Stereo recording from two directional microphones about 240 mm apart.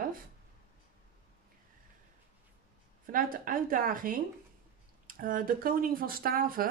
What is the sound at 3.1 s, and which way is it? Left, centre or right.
Speech, right.